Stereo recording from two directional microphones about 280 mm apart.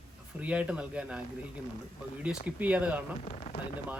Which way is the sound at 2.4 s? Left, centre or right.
Centre.